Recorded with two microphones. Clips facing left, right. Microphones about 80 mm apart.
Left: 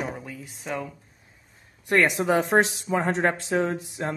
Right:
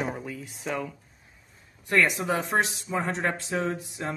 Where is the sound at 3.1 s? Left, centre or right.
Left.